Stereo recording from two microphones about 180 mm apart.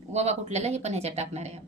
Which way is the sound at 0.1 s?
35° right (ahead or behind).